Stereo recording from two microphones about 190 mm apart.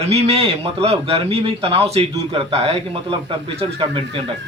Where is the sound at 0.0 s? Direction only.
35° right (ahead or behind).